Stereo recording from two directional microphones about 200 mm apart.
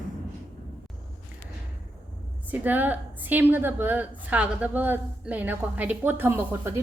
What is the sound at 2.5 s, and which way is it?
A woman's voice, 10° right (ahead or behind).